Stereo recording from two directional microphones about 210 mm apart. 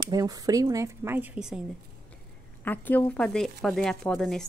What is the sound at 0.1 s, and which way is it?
Speech, 15° right (ahead or behind).